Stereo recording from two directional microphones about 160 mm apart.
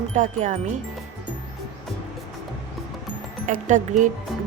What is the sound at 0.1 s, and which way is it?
Speech, 50° right (ahead or behind).